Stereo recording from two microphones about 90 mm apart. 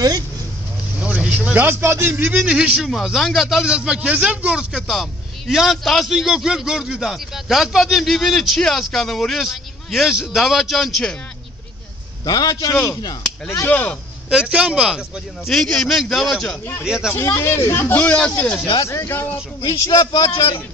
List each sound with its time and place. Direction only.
0.9 s speech: 15° right (ahead or behind)
2.4 s a man's voice: 10° right (ahead or behind)
12.3 s a man's voice: 45° left (ahead or behind)
12.7 s speech: 35° left (ahead or behind)
13.7 s speech: 15° left (ahead or behind)
14.3 s a man's voice: 10° right (ahead or behind)
15.5 s a man's voice: 5° left (ahead or behind)
16.8 s a man's voice: 10° right (ahead or behind)
17.1 s speech: 30° left (ahead or behind)
18.8 s speech: 30° left (ahead or behind)
19.9 s a man's voice: 45° left (ahead or behind)